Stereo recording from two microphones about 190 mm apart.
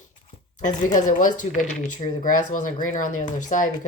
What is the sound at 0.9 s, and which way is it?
Speech, 40° left (ahead or behind).